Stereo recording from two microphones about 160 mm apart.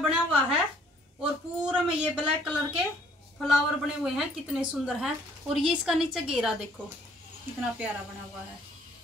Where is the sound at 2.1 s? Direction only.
5° right (ahead or behind).